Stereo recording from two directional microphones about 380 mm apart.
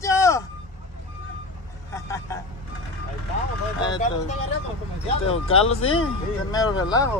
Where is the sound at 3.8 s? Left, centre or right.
Centre.